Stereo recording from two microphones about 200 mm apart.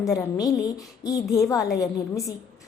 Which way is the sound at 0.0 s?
15° left (ahead or behind).